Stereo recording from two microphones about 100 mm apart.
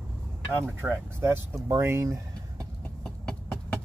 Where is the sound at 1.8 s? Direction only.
25° right (ahead or behind).